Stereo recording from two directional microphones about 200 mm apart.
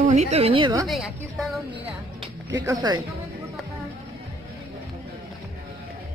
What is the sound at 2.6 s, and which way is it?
Speech, 20° right (ahead or behind).